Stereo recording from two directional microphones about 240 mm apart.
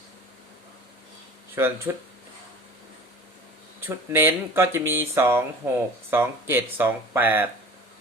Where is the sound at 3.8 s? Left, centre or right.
Centre.